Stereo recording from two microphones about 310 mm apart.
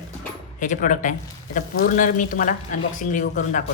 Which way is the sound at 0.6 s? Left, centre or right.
Left.